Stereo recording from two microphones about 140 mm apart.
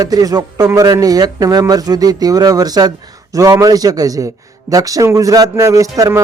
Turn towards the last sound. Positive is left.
turn(degrees=-25)  # may be behind; listen again after turning